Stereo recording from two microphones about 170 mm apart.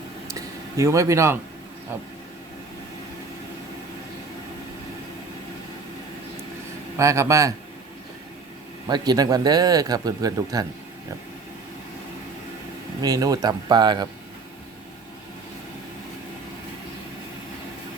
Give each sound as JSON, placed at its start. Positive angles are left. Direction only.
{"t": 0.3, "sound": "a sound", "side_deg": -20}
{"t": 6.9, "sound": "speech", "side_deg": -15}
{"t": 8.9, "sound": "speech", "side_deg": -25}
{"t": 13.0, "sound": "speech", "side_deg": -20}